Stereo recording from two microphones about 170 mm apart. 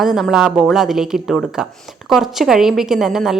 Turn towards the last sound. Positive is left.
turn(degrees=0)  # may be behind; listen again after turning